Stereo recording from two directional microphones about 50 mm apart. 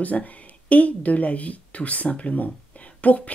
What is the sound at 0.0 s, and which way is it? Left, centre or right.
Speech, left.